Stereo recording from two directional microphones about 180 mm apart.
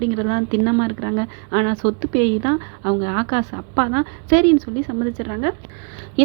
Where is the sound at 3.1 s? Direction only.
35° right (ahead or behind).